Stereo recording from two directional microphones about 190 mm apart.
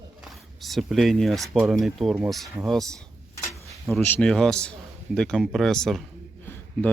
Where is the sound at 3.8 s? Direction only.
5° left (ahead or behind).